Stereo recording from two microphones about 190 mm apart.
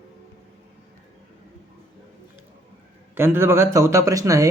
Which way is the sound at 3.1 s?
10° right (ahead or behind).